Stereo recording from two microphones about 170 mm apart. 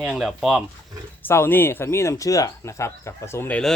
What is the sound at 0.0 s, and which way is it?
Speech, 5° right (ahead or behind).